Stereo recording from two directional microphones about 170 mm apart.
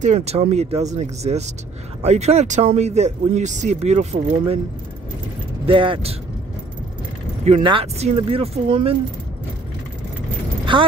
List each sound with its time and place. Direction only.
0.0 s speech: 40° right (ahead or behind)
5.7 s speech: 30° right (ahead or behind)
7.6 s speech: 35° right (ahead or behind)
10.6 s a sound: 30° right (ahead or behind)